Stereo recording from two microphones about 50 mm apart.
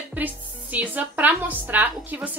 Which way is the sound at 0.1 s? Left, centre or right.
Right.